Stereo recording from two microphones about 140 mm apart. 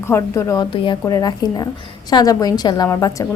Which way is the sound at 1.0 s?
25° left (ahead or behind).